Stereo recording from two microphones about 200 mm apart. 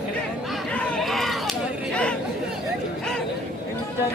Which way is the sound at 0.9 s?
Centre (ahead or behind).